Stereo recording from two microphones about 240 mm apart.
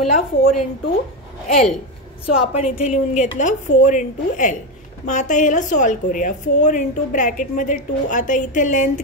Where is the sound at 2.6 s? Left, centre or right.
Left.